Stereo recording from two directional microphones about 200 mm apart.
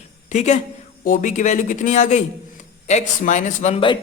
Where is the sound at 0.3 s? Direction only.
35° left (ahead or behind).